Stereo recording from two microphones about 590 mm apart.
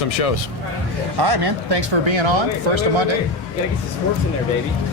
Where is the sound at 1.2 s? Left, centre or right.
Right.